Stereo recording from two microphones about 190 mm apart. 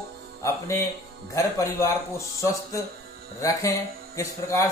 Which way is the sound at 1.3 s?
15° left (ahead or behind).